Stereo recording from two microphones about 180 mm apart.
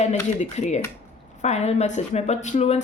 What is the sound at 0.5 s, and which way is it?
A woman's voice, 40° left (ahead or behind).